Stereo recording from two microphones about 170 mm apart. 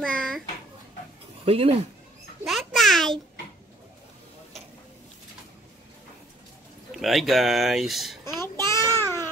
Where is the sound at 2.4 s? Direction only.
Centre (ahead or behind).